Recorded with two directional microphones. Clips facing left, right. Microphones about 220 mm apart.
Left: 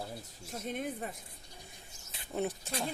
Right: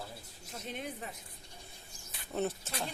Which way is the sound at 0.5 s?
45° left (ahead or behind).